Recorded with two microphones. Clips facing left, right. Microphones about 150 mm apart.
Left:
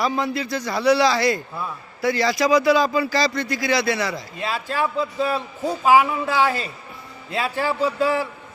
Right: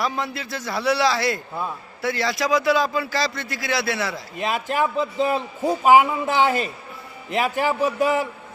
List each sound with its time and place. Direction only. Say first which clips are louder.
0.0 s speech: left 3 dB; centre (ahead or behind)
4.4 s a man's voice: right 3 dB; 20° right (ahead or behind)